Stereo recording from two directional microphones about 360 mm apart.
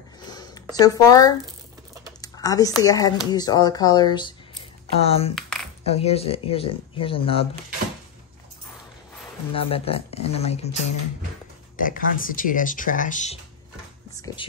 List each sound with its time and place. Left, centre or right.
0.3 s a sound: centre
2.2 s speech: centre
5.3 s a sound: centre
5.9 s speech: centre
9.5 s speech: centre
11.7 s speech: left